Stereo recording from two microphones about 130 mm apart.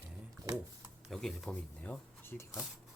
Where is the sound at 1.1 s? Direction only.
5° left (ahead or behind); by 2.5 s 20° left (ahead or behind).